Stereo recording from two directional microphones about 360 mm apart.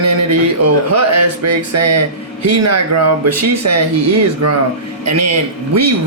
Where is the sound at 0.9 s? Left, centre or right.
Right.